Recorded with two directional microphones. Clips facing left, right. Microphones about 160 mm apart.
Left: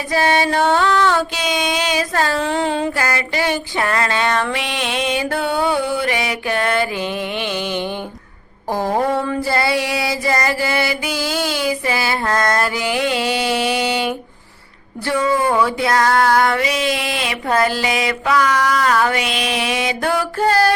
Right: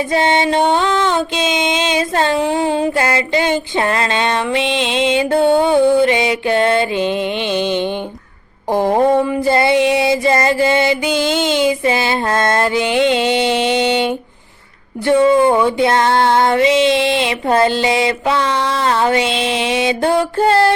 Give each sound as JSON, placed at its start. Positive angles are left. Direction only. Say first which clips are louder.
{"t": 0.1, "sound": "music", "louder": "even", "side_deg": -25}